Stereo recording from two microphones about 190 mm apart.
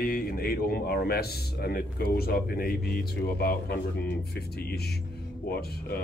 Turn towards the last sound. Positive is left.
turn(degrees=55)  # may be behind; listen again after turning